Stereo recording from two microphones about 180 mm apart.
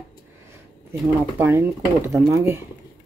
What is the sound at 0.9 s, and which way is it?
Speech, 10° right (ahead or behind).